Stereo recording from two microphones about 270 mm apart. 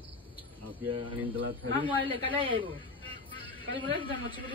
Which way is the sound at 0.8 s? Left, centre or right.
Right.